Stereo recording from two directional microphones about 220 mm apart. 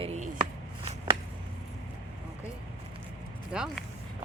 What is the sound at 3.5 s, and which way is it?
Speech, 5° right (ahead or behind).